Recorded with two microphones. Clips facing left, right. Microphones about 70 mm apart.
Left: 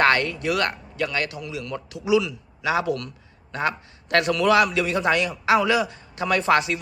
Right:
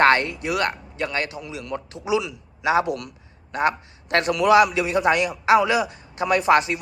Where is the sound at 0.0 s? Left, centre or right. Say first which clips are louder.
Right 2 dB; right.